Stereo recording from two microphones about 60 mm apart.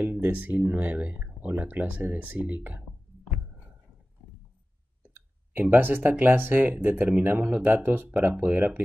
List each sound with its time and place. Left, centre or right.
0.0 s speech: right
5.5 s speech: right